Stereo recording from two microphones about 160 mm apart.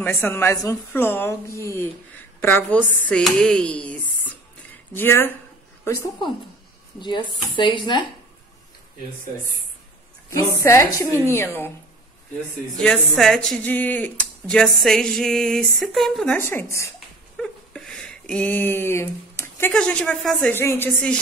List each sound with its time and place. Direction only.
0.0 s a woman's voice: 10° left (ahead or behind); by 8.1 s 30° left (ahead or behind)
10.3 s speech: 20° left (ahead or behind)
12.7 s speech: 5° left (ahead or behind)
16.3 s speech: 15° left (ahead or behind)
17.4 s speech: 5° left (ahead or behind)